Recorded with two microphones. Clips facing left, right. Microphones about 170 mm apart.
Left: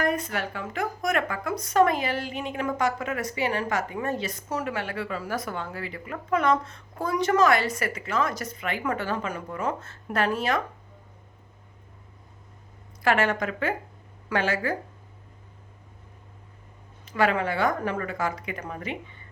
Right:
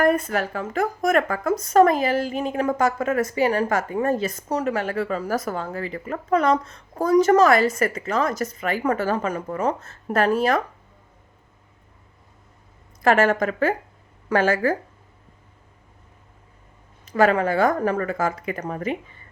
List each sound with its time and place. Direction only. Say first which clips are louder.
0.0 s a woman's voice: right 7 dB; 55° right (ahead or behind)
13.1 s a woman's voice: right 6 dB; 45° right (ahead or behind)
17.1 s a woman's voice: right 6 dB; 40° right (ahead or behind)